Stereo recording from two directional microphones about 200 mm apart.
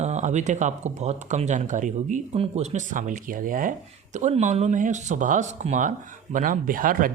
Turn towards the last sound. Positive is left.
turn(degrees=-45)  # may be behind; listen again after turning